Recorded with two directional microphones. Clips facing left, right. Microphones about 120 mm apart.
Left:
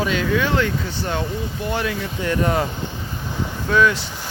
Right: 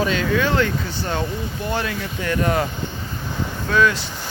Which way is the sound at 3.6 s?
20° left (ahead or behind).